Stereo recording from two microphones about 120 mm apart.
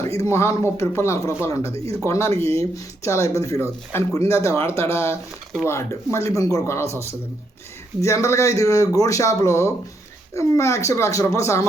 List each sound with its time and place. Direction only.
0.2 s speech: 25° left (ahead or behind)
1.7 s speech: 55° right (ahead or behind)
2.0 s speech: 25° left (ahead or behind)
8.0 s speech: 25° left (ahead or behind)